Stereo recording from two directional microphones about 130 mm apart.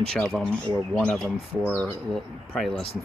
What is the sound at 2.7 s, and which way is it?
Speech, 45° left (ahead or behind).